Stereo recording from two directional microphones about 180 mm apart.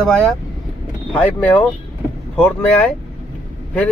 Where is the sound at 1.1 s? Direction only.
10° left (ahead or behind).